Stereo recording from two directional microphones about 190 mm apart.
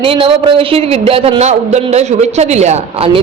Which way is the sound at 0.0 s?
30° right (ahead or behind).